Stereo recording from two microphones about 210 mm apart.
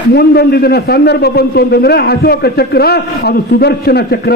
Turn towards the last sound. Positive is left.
turn(degrees=50)  # may be behind; listen again after turning